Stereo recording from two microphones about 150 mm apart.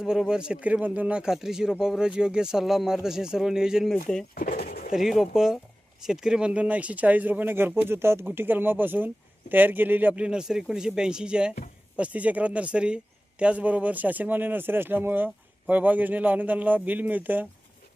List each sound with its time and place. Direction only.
0.0 s speech: 5° right (ahead or behind)
4.4 s drawer open or close: 80° left
4.9 s speech: centre (ahead or behind)